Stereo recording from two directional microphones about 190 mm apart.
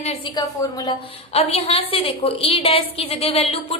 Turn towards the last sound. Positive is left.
turn(degrees=30)  # may be behind; listen again after turning